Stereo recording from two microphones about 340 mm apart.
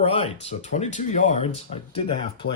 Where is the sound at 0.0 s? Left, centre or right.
Centre.